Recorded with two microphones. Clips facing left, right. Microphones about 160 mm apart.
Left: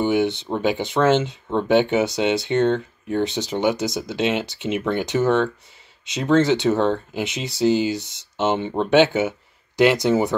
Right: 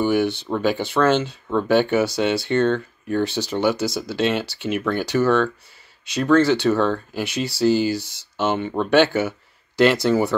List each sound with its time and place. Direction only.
0.0 s speech: 20° left (ahead or behind)